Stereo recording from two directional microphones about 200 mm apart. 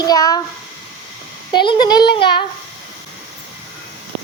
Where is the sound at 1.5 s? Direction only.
25° left (ahead or behind).